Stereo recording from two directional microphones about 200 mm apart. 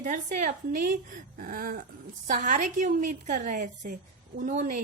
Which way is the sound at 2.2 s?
40° right (ahead or behind).